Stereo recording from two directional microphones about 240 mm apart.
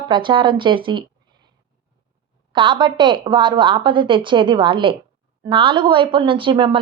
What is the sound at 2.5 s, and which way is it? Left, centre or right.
A woman's voice, centre.